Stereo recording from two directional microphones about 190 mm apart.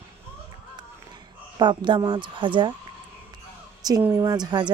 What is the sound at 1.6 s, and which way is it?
A woman's voice, 25° right (ahead or behind).